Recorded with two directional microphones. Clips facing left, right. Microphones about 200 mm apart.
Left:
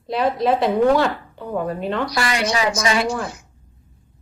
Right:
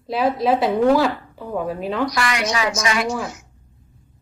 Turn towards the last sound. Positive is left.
turn(degrees=30)  # may be behind; listen again after turning